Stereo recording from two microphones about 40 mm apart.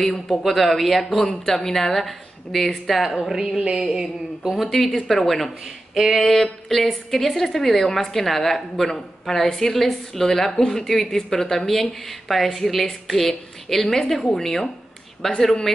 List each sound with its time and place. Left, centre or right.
0.0 s a woman's voice: centre
3.3 s a sound: centre
4.6 s a woman's voice: centre